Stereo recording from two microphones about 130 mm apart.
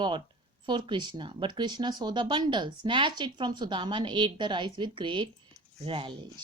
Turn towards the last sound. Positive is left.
turn(degrees=-35)  # may be behind; listen again after turning